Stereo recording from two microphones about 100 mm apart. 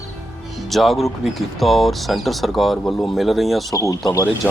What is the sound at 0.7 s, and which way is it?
Speech, centre (ahead or behind).